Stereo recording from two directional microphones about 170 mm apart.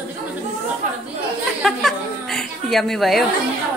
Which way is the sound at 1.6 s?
Centre (ahead or behind).